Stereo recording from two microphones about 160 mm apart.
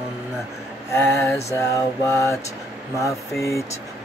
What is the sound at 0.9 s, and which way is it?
Mantra, 15° left (ahead or behind).